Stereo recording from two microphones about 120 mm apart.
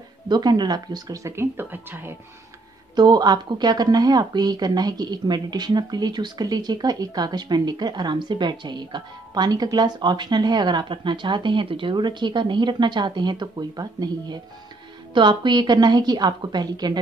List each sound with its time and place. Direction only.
0.3 s speech: 35° right (ahead or behind); by 2.1 s 15° right (ahead or behind)
3.0 s speech: 35° right (ahead or behind)